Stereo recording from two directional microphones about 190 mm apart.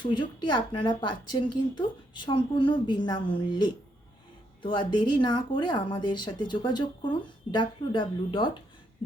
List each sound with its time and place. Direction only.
0.0 s speech: 25° left (ahead or behind)